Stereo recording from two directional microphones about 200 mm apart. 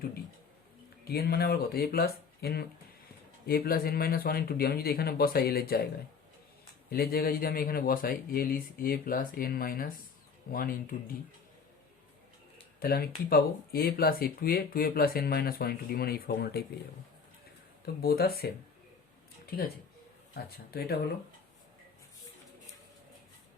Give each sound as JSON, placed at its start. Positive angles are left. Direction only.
{"t": 1.0, "sound": "speech", "side_deg": 50}
{"t": 6.9, "sound": "speech", "side_deg": 50}
{"t": 12.8, "sound": "speech", "side_deg": 50}
{"t": 18.0, "sound": "speech", "side_deg": 50}
{"t": 20.3, "sound": "speech", "side_deg": 50}